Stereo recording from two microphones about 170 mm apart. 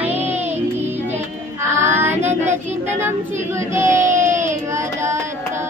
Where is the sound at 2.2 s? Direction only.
15° right (ahead or behind).